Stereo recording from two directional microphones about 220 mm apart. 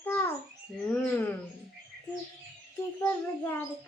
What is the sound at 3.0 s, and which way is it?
Speech, 10° left (ahead or behind).